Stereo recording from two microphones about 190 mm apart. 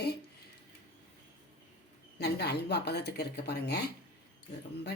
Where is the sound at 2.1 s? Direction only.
60° left (ahead or behind).